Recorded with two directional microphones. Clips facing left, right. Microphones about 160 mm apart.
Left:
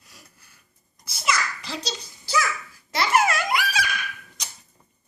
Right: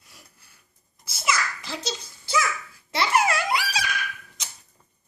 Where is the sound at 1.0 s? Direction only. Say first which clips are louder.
Right 1 dB; 25° right (ahead or behind).